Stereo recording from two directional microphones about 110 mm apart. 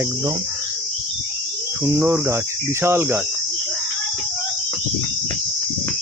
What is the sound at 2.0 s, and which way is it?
Cricket, 20° right (ahead or behind).